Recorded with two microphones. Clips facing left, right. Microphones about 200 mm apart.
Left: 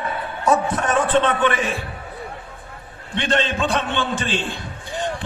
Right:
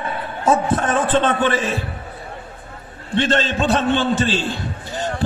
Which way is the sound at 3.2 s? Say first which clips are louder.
Right 2 dB; 35° right (ahead or behind).